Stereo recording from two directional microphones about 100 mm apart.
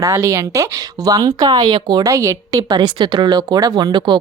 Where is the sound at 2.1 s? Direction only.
30° right (ahead or behind).